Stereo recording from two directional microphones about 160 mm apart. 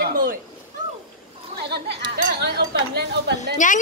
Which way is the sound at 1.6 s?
90° right.